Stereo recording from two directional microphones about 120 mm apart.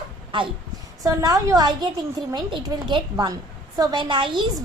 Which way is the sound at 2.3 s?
40° right (ahead or behind).